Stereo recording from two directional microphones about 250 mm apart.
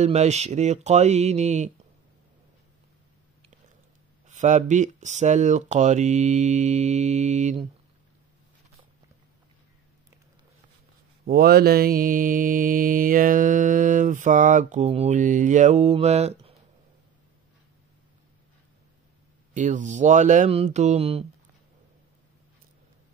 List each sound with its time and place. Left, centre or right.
0.0 s speech: right
4.3 s speech: right
11.2 s mantra: right
19.5 s speech: right